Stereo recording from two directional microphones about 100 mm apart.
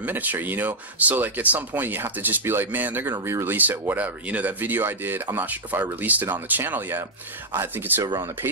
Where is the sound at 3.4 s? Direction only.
20° right (ahead or behind).